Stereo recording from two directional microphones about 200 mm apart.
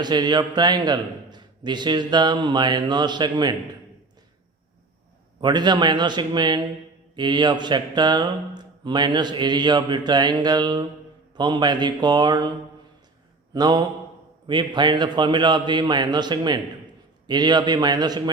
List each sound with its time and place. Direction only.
0.0 s speech: 20° right (ahead or behind)
5.4 s speech: 20° right (ahead or behind)
13.5 s speech: 20° right (ahead or behind)